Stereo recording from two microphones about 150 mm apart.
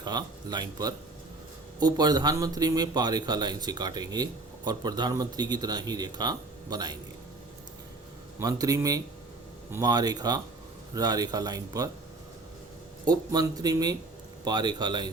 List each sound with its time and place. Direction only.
0.0 s speech: 25° right (ahead or behind)
8.4 s speech: 25° right (ahead or behind)
13.1 s speech: 25° right (ahead or behind)